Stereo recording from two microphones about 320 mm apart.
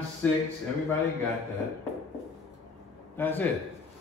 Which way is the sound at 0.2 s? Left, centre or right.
Centre.